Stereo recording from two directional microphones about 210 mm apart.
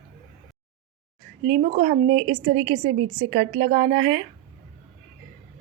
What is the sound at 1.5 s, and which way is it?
Speech, 30° right (ahead or behind).